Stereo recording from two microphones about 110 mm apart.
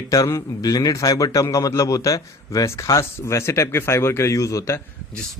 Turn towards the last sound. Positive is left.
turn(degrees=30)  # may be behind; listen again after turning